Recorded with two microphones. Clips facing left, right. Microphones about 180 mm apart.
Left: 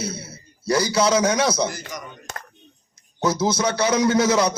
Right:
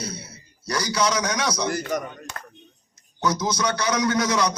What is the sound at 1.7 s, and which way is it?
Speech, 60° right (ahead or behind).